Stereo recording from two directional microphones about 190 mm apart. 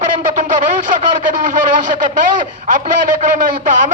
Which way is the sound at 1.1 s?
40° right (ahead or behind).